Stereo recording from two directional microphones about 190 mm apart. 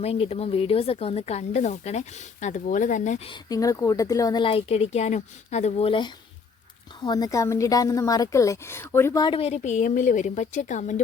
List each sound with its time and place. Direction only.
0.0 s speech: 35° left (ahead or behind)
3.2 s a woman's voice: 20° left (ahead or behind); by 11.0 s 40° left (ahead or behind)